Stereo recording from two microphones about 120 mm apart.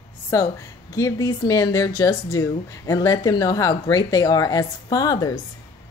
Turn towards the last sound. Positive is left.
turn(degrees=30)  # may be behind; listen again after turning